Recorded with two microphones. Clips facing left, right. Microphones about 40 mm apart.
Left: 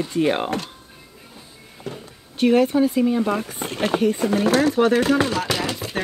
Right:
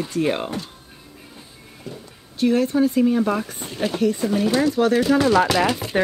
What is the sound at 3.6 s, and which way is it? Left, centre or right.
Speech, left.